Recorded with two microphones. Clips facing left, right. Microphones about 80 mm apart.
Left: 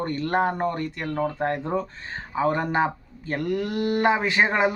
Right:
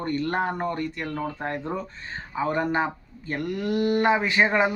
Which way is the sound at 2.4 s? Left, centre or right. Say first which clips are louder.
Left 2 dB; left.